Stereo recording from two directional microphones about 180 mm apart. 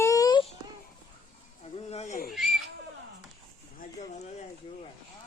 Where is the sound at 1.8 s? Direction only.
35° left (ahead or behind).